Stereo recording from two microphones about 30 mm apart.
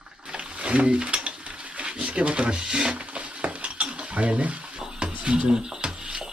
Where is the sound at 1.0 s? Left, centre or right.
Right.